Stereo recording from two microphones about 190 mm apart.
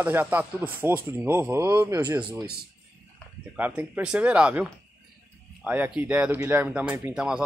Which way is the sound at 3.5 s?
10° right (ahead or behind).